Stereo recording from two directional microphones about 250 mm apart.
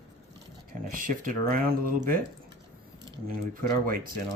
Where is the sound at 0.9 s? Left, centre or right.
Right.